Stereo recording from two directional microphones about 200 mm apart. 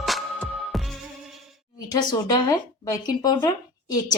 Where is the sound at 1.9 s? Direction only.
20° left (ahead or behind).